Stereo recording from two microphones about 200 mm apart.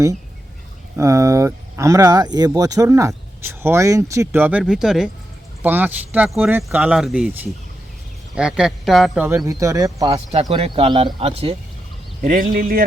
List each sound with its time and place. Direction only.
0.9 s speech: 15° right (ahead or behind)
10.5 s speech: 30° right (ahead or behind)
12.2 s speech: 45° right (ahead or behind)